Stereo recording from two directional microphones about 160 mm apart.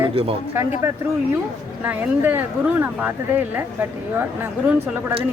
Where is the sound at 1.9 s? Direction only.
10° right (ahead or behind).